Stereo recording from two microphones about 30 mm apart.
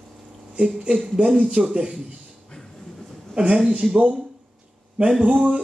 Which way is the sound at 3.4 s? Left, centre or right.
Right.